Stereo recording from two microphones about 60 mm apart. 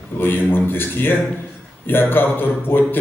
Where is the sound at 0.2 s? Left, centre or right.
Left.